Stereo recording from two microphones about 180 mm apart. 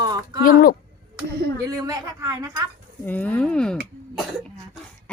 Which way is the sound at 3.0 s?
10° left (ahead or behind).